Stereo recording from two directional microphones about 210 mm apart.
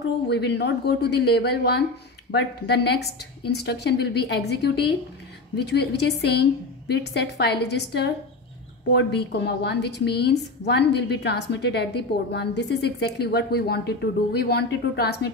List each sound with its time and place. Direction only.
0.3 s a woman's voice: 55° left (ahead or behind)